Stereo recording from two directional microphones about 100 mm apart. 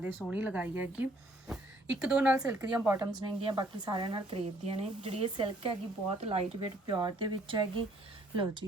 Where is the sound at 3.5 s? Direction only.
45° right (ahead or behind); by 6.4 s 90° right.